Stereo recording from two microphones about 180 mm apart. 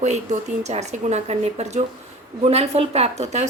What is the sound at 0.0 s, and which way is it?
A woman's voice, 40° right (ahead or behind).